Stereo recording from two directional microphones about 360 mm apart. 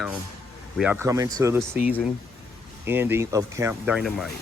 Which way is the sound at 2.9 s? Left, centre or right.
Centre.